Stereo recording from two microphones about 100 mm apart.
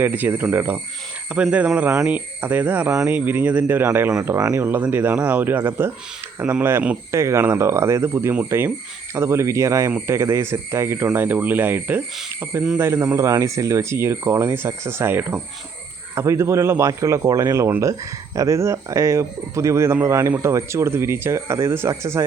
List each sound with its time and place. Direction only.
0.0 s speech: 20° right (ahead or behind)
4.4 s speech: 35° right (ahead or behind)
4.6 s speech: 20° right (ahead or behind)